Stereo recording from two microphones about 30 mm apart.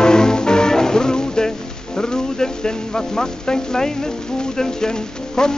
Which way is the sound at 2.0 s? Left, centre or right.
Left.